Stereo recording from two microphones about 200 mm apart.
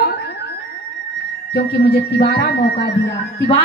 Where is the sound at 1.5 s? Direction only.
55° left (ahead or behind).